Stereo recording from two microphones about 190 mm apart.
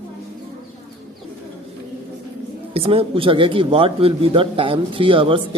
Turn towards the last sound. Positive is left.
turn(degrees=-25)  # may be behind; listen again after turning